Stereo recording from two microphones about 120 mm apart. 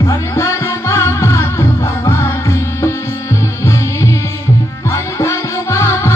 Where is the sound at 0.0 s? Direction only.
25° left (ahead or behind).